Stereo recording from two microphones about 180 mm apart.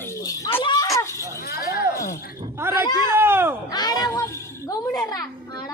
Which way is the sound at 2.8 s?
25° left (ahead or behind).